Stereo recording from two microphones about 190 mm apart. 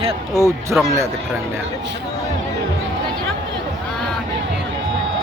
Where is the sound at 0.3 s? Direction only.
15° right (ahead or behind).